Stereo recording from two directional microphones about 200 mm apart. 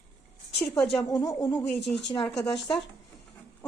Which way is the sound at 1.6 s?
Centre (ahead or behind).